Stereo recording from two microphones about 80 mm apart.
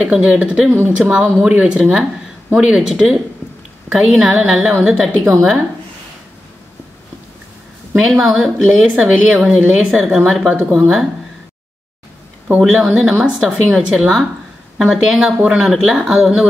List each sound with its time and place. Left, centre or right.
0.0 s a woman's voice: centre
0.7 s a woman's voice: right
8.0 s a woman's voice: centre
12.5 s a woman's voice: centre